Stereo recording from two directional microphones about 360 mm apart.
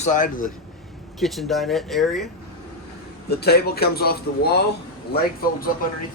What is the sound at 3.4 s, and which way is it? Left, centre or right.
A man's voice, left.